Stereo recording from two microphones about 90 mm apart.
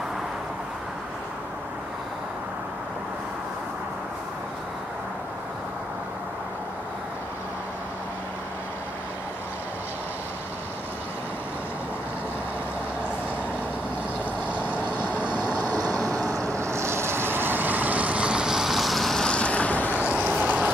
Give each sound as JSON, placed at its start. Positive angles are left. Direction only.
{"t": 15.9, "sound": "vehicle", "side_deg": -40}
{"t": 20.0, "sound": "vehicle", "side_deg": -15}